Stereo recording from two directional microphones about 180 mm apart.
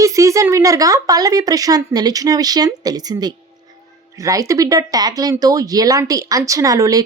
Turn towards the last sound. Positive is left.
turn(degrees=-20)  # may be behind; listen again after turning